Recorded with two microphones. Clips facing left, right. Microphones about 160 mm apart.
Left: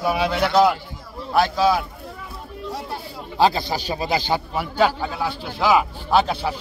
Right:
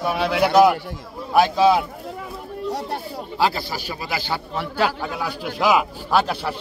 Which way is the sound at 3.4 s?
20° left (ahead or behind).